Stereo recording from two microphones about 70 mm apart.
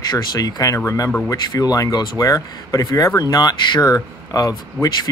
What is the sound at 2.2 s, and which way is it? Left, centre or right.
Speech, left.